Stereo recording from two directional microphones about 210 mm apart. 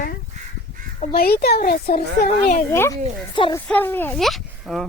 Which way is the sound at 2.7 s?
10° left (ahead or behind).